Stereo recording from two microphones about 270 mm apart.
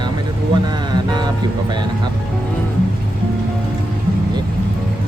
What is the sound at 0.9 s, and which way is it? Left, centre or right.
Music, centre.